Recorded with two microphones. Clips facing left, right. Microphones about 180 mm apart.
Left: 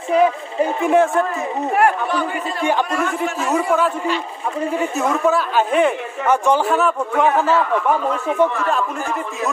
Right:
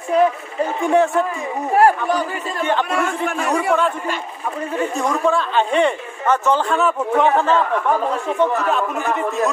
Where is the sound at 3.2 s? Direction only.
55° right (ahead or behind).